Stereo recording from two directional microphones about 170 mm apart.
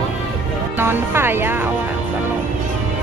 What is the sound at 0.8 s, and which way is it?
Speech, 15° right (ahead or behind).